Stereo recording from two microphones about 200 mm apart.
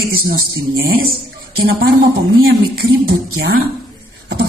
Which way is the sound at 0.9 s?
50° right (ahead or behind).